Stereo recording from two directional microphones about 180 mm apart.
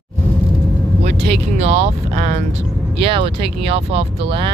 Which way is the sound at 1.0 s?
35° right (ahead or behind).